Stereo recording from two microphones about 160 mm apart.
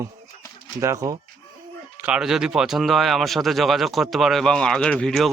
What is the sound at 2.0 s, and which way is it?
Speech, 5° right (ahead or behind).